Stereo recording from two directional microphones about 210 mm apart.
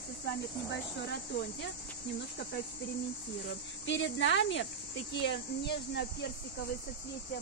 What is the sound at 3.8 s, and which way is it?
Speech, 60° left (ahead or behind).